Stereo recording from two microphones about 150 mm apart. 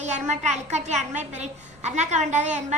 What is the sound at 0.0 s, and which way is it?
A woman's voice, 50° right (ahead or behind).